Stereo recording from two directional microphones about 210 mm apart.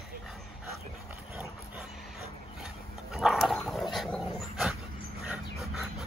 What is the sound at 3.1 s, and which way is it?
Dog, centre (ahead or behind).